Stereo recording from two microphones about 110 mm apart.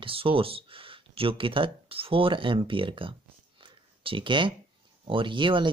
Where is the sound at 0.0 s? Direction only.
55° right (ahead or behind).